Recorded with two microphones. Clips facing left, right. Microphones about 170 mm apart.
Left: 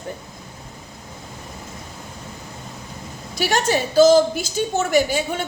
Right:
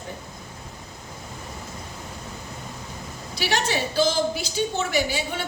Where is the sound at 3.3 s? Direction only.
45° left (ahead or behind).